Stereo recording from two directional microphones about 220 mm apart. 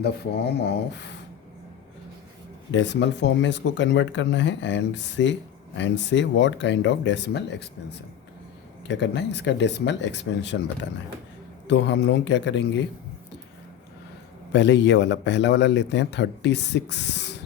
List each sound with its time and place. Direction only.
0.0 s a man's voice: 45° left (ahead or behind)
2.7 s speech: 55° left (ahead or behind)
8.9 s a man's voice: 50° left (ahead or behind)
14.5 s a man's voice: 55° left (ahead or behind)